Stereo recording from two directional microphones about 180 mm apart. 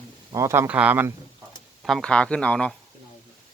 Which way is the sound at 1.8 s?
Centre (ahead or behind).